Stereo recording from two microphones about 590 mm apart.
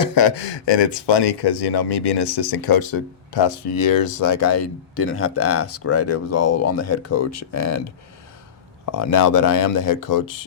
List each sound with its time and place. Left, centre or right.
0.0 s speech: left
8.9 s speech: left